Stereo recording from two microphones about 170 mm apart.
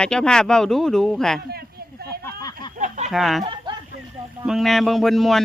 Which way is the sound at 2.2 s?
20° left (ahead or behind).